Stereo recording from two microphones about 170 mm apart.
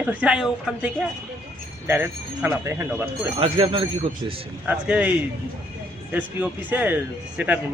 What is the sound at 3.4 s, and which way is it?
Speech, 35° right (ahead or behind).